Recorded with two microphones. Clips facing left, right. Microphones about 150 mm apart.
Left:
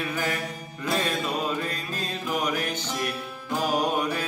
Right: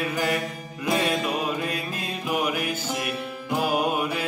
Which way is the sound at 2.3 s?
10° right (ahead or behind).